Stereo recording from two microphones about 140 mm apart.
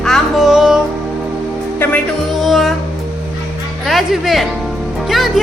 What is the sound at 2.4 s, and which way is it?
Music, centre (ahead or behind).